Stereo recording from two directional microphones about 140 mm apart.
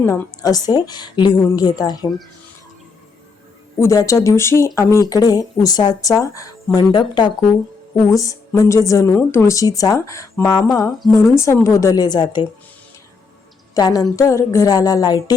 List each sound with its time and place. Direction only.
0.0 s speech: 25° left (ahead or behind)
3.8 s speech: 20° left (ahead or behind)
13.7 s speech: 25° left (ahead or behind)